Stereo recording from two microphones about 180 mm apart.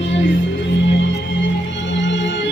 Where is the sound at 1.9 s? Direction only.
90° left.